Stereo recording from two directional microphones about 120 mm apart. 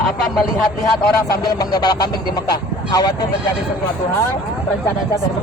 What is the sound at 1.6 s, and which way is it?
Speech, 35° left (ahead or behind).